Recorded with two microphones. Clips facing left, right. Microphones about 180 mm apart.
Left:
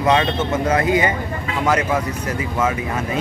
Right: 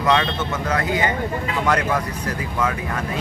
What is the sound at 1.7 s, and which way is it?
Speech, 5° left (ahead or behind).